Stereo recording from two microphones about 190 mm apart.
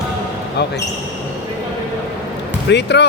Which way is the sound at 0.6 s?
65° left (ahead or behind).